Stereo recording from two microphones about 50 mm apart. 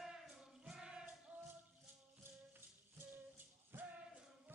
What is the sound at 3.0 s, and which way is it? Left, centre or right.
Music, right.